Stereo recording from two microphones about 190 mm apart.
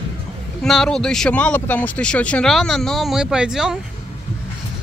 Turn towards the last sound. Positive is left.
turn(degrees=-5)  # may be behind; listen again after turning